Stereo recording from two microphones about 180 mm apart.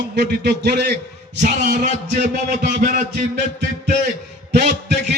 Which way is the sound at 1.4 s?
45° right (ahead or behind).